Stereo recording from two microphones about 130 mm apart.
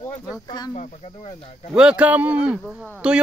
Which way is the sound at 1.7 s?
5° right (ahead or behind).